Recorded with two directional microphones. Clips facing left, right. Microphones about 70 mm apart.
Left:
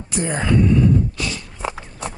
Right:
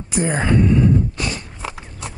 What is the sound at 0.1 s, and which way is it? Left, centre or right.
Speech, centre.